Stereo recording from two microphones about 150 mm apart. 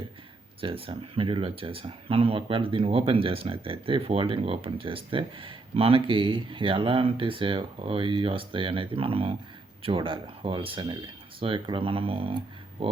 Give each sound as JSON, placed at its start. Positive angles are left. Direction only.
{"t": 0.6, "sound": "speech", "side_deg": -35}